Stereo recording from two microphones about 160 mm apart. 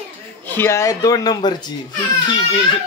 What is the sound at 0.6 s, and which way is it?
Speech, 15° left (ahead or behind).